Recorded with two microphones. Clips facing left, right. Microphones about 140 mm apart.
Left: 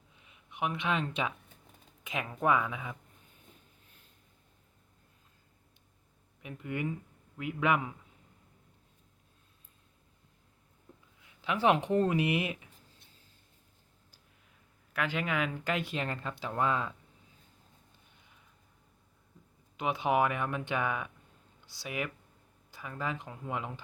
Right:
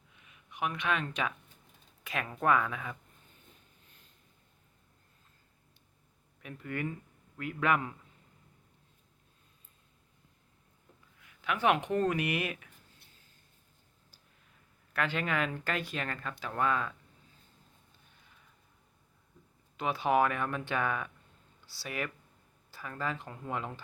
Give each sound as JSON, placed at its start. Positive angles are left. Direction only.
{"t": 0.1, "sound": "a sound", "side_deg": 25}
{"t": 2.4, "sound": "speech", "side_deg": 15}
{"t": 6.4, "sound": "speech", "side_deg": 15}
{"t": 11.2, "sound": "speech", "side_deg": 25}
{"t": 14.9, "sound": "speech", "side_deg": 10}
{"t": 15.7, "sound": "speech", "side_deg": 25}
{"t": 19.7, "sound": "speech", "side_deg": 20}